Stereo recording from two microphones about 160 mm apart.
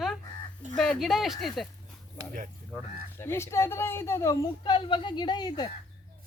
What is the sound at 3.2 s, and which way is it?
Speech, 15° left (ahead or behind).